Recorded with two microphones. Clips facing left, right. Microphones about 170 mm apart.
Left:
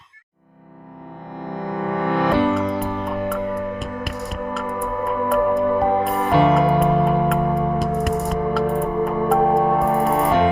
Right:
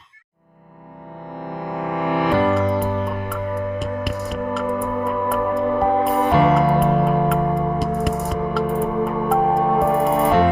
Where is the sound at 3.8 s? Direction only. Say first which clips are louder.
Right 3 dB; centre (ahead or behind).